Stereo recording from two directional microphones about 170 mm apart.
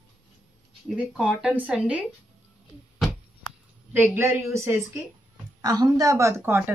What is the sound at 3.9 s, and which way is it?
A woman's voice, 10° right (ahead or behind).